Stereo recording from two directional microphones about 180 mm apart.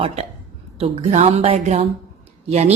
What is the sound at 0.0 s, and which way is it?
Speech, 35° right (ahead or behind).